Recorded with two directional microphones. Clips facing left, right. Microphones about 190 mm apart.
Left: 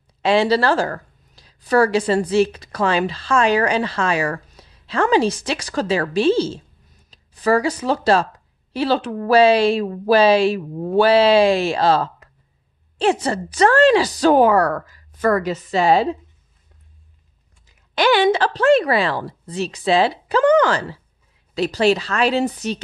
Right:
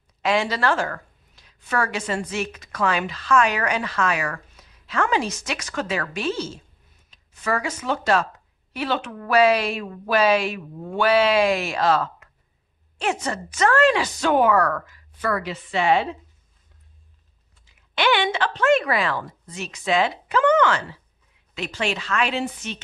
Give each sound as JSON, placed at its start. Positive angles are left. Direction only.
{"t": 0.2, "sound": "speech", "side_deg": 30}
{"t": 17.6, "sound": "speech", "side_deg": 40}